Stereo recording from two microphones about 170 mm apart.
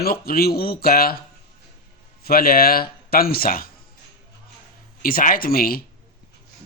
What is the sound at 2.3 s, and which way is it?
Speech, 60° left (ahead or behind).